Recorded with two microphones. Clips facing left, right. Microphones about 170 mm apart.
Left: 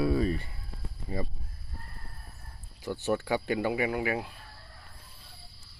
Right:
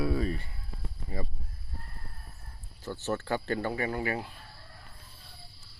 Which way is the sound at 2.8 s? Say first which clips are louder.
Left 3 dB; 10° left (ahead or behind).